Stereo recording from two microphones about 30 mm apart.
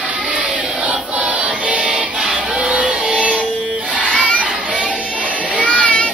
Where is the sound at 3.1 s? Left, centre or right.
Right.